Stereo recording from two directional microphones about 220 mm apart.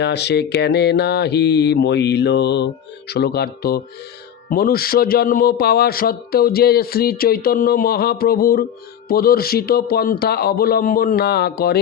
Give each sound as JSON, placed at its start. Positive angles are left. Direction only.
{"t": 0.0, "sound": "a man's voice", "side_deg": 50}